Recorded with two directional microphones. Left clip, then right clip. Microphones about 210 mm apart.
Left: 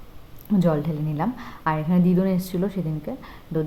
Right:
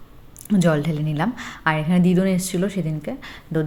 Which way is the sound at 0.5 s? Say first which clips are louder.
Right 3 dB; 10° right (ahead or behind).